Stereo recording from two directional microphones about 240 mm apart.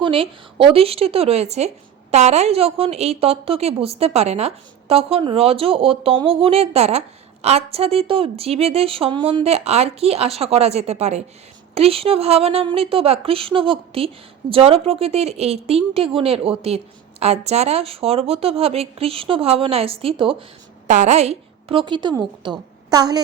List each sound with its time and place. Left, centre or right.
0.0 s a woman's voice: right